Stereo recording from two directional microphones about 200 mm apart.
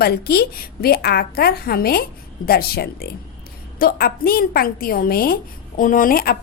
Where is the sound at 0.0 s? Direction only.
50° left (ahead or behind).